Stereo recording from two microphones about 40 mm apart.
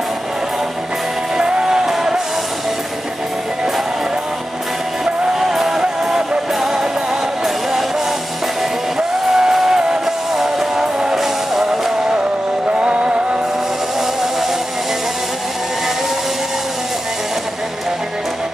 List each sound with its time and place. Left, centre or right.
1.3 s music: centre
5.3 s music: centre
9.3 s music: centre
12.7 s music: right